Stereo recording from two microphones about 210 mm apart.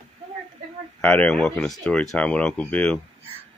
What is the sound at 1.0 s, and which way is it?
Speech, 5° left (ahead or behind).